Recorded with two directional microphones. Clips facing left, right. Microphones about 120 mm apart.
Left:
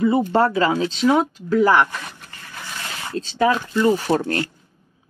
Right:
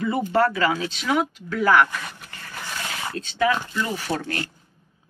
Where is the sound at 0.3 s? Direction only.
25° left (ahead or behind).